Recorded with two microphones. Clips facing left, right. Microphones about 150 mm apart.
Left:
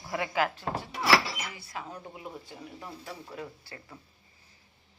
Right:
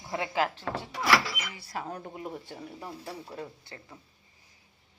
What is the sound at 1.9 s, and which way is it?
Speech, 50° right (ahead or behind).